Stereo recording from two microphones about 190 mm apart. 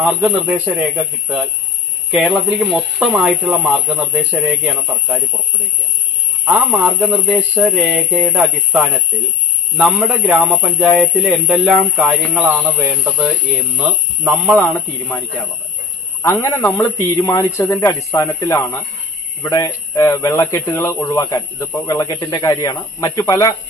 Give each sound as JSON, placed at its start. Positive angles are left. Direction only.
{"t": 0.0, "sound": "speech", "side_deg": -5}
{"t": 2.7, "sound": "speech", "side_deg": -5}
{"t": 6.4, "sound": "speech", "side_deg": -5}
{"t": 16.2, "sound": "speech", "side_deg": 15}